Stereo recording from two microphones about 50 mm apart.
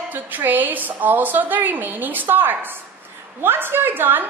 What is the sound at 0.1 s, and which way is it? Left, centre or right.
A woman's voice, right.